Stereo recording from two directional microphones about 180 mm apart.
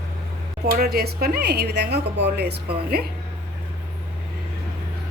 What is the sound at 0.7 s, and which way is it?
Speech, 55° right (ahead or behind).